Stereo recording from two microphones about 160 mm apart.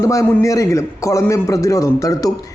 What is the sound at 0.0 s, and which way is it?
A man's voice, 20° left (ahead or behind).